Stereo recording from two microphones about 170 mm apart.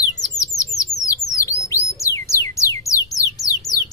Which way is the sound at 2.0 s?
15° left (ahead or behind).